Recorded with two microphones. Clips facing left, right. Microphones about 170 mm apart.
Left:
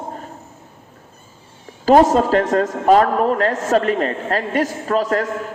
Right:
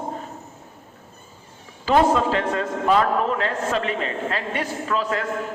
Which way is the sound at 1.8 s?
40° left (ahead or behind).